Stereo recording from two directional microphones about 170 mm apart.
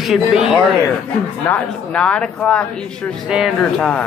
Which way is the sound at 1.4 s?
5° left (ahead or behind).